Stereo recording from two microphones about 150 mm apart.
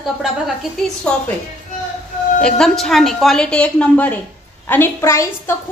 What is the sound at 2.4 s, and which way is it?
A woman's voice, 5° left (ahead or behind).